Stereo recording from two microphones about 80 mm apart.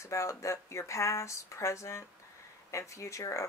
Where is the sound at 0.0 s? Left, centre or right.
Left.